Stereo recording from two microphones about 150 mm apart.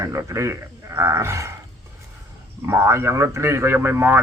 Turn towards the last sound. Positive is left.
turn(degrees=-15)  # may be behind; listen again after turning